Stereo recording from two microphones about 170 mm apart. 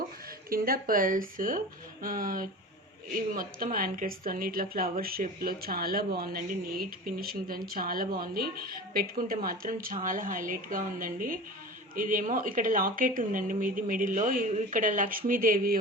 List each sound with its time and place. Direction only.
0.5 s speech: 60° right (ahead or behind)